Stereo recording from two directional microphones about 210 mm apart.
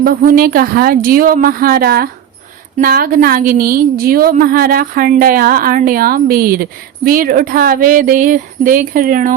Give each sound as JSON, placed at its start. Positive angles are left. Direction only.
{"t": 0.0, "sound": "a woman's voice", "side_deg": -45}